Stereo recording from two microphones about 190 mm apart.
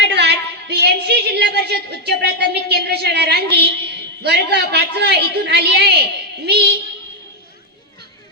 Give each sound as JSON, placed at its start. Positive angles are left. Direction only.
{"t": 0.0, "sound": "a woman's voice", "side_deg": -60}